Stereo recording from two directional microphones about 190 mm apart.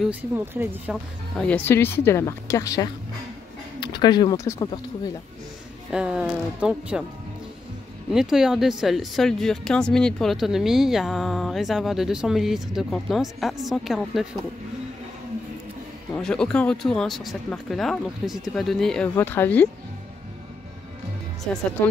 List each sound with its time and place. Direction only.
0.0 s speech: 10° right (ahead or behind)
1.3 s speech: 5° left (ahead or behind)
5.9 s speech: 5° right (ahead or behind)
8.1 s speech: centre (ahead or behind)
16.2 s speech: 5° left (ahead or behind)